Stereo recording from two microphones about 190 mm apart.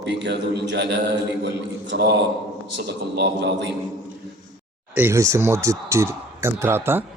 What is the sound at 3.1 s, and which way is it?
Speech, 60° right (ahead or behind).